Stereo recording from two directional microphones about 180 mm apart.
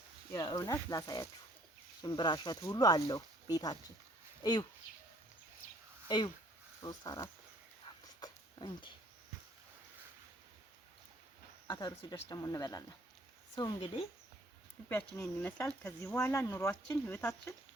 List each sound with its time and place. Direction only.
0.3 s speech: 20° left (ahead or behind)
6.1 s speech: 25° left (ahead or behind)
7.9 s dog: 25° left (ahead or behind)
11.7 s speech: 25° left (ahead or behind)
13.7 s speech: 30° left (ahead or behind)
14.8 s speech: 15° left (ahead or behind)